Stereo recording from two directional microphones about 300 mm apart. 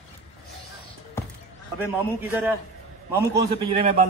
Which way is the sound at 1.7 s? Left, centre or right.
Centre.